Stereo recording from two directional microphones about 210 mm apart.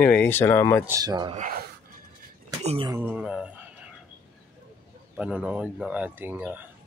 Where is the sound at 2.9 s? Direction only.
5° right (ahead or behind).